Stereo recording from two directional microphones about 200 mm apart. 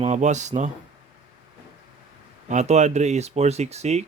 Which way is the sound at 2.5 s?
35° right (ahead or behind).